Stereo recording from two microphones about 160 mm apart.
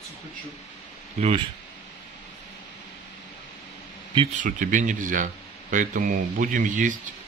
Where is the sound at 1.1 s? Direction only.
40° right (ahead or behind).